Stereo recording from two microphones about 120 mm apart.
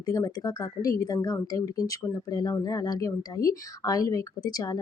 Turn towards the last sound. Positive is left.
turn(degrees=30)  # may be behind; listen again after turning